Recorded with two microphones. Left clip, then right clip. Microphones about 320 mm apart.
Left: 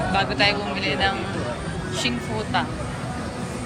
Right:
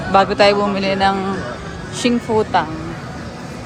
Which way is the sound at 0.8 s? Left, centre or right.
Right.